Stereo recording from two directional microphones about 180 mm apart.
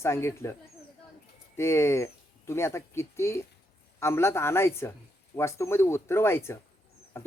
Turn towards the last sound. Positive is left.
turn(degrees=15)  # may be behind; listen again after turning